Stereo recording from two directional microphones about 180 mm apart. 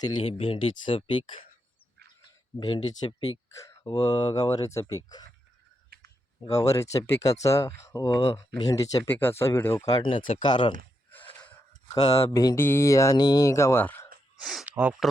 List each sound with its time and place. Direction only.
0.0 s speech: 30° left (ahead or behind)
2.6 s speech: 25° left (ahead or behind)
5.9 s clicking: 60° right (ahead or behind)
6.5 s speech: 20° left (ahead or behind)
11.9 s speech: 20° left (ahead or behind)
14.3 s speech: 5° right (ahead or behind)